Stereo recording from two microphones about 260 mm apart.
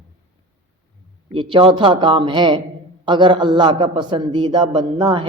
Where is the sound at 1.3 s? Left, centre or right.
Centre.